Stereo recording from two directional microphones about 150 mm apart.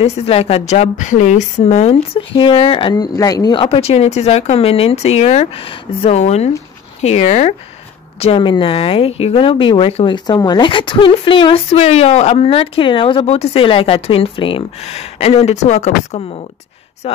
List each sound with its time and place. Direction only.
0.0 s a woman's voice: 40° left (ahead or behind)
2.1 s speech: 35° left (ahead or behind)
3.6 s a woman's voice: 40° left (ahead or behind)